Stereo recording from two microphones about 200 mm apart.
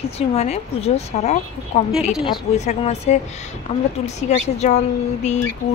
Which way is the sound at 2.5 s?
35° left (ahead or behind).